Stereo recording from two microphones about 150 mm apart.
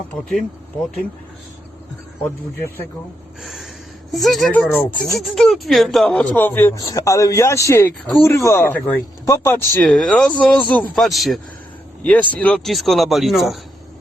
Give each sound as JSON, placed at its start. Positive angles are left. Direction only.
{"t": 3.4, "sound": "a sound", "side_deg": 0}
{"t": 4.1, "sound": "speech", "side_deg": 0}
{"t": 4.7, "sound": "speech", "side_deg": 10}
{"t": 5.2, "sound": "speech", "side_deg": 0}
{"t": 9.7, "sound": "speech", "side_deg": 5}
{"t": 12.0, "sound": "speech", "side_deg": 10}